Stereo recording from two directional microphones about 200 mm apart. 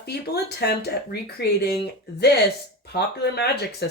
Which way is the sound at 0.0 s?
55° left (ahead or behind).